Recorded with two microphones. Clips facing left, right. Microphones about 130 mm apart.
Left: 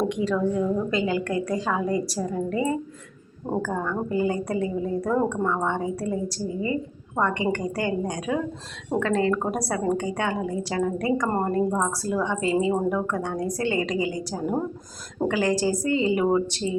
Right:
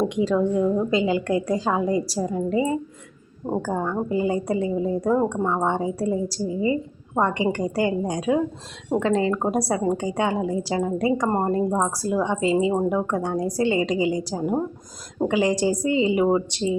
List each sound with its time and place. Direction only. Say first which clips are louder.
0.1 s a woman's voice: right 3 dB; 25° right (ahead or behind)